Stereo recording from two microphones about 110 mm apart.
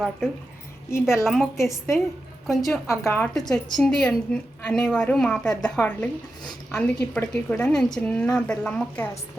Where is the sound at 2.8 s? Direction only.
25° left (ahead or behind).